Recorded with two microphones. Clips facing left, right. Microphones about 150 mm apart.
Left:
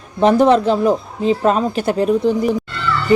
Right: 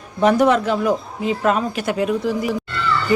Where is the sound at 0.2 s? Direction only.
30° left (ahead or behind).